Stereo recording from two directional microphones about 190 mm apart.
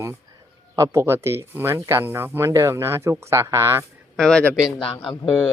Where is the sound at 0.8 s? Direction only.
15° right (ahead or behind).